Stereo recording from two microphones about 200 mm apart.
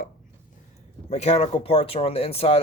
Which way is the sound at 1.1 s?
35° left (ahead or behind).